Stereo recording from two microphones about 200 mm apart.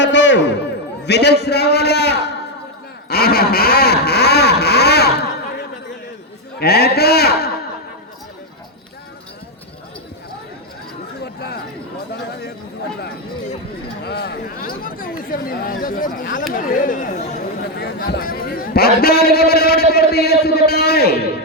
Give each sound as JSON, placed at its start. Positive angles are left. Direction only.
{"t": 0.0, "sound": "a sound", "side_deg": 65}
{"t": 1.0, "sound": "a man's voice", "side_deg": 55}
{"t": 3.1, "sound": "vehicle", "side_deg": 50}
{"t": 6.6, "sound": "vehicle", "side_deg": 50}
{"t": 11.3, "sound": "chatter", "side_deg": 55}
{"t": 14.0, "sound": "speech", "side_deg": 55}
{"t": 14.8, "sound": "vehicle", "side_deg": 45}
{"t": 17.6, "sound": "a man's voice", "side_deg": 50}